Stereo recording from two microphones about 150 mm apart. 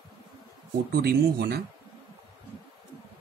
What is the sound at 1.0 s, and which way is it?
Speech, 90° right.